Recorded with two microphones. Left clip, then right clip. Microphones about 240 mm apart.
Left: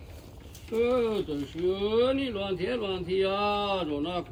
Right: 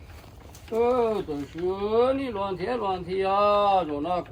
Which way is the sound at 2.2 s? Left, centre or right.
Right.